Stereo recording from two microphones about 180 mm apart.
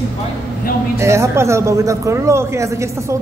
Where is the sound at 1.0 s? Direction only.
15° right (ahead or behind).